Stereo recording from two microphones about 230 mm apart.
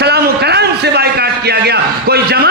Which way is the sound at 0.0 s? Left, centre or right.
Right.